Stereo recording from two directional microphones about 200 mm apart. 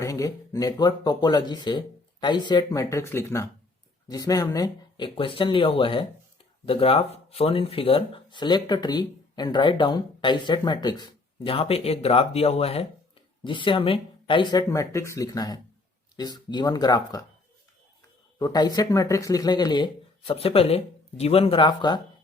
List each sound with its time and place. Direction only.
0.0 s speech: 15° left (ahead or behind)
18.3 s speech: 20° left (ahead or behind)